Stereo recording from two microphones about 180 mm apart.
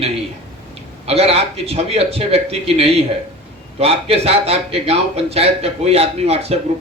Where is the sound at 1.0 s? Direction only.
35° right (ahead or behind).